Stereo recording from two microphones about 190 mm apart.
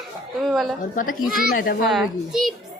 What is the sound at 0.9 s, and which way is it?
Speech, 45° left (ahead or behind).